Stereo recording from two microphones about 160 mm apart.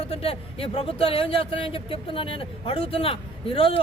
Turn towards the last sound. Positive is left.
turn(degrees=35)  # may be behind; listen again after turning